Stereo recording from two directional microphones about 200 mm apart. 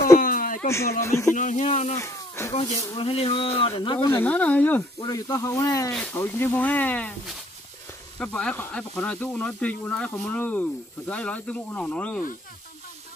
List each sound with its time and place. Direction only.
0.2 s a sound: 45° left (ahead or behind)
0.7 s speech: 15° left (ahead or behind)
1.3 s speech: 40° left (ahead or behind)
2.0 s speech: 15° left (ahead or behind)
4.2 s speech: 5° left (ahead or behind)